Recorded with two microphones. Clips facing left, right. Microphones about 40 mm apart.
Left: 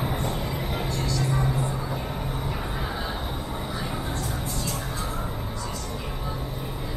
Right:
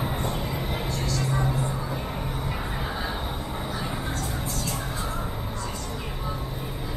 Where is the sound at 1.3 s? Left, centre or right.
Centre.